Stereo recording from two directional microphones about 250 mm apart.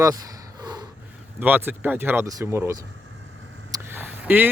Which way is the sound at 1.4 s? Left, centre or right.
Centre.